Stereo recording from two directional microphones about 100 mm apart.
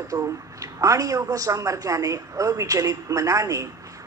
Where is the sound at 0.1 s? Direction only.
35° right (ahead or behind).